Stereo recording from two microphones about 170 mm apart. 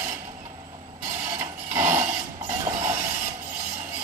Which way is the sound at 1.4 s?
15° right (ahead or behind).